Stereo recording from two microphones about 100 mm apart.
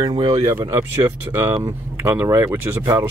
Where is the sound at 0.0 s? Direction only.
50° right (ahead or behind).